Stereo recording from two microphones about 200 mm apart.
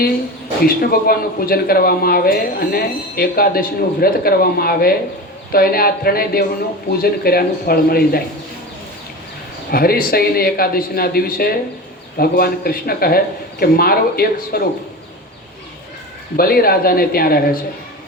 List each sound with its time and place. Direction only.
0.6 s speech: 50° left (ahead or behind)
9.7 s speech: 50° left (ahead or behind)
16.4 s speech: 50° left (ahead or behind)